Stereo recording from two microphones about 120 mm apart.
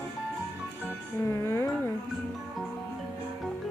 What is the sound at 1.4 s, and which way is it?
Speech, 20° left (ahead or behind).